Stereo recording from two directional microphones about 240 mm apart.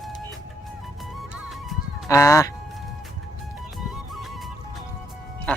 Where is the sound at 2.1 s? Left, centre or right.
Centre.